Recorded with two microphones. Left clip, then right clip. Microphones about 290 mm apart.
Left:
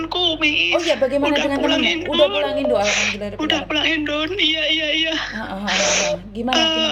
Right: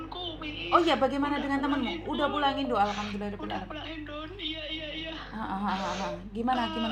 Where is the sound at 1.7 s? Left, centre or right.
Left.